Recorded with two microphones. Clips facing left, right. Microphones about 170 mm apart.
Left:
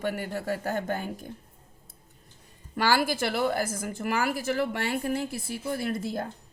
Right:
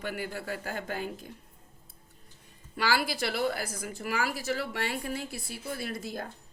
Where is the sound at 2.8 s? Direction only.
45° left (ahead or behind).